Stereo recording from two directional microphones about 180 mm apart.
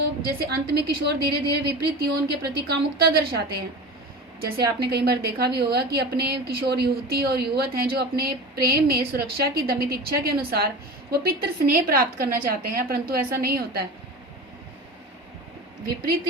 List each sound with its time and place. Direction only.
0.3 s a woman's voice: 60° right (ahead or behind)
15.9 s a woman's voice: 60° right (ahead or behind)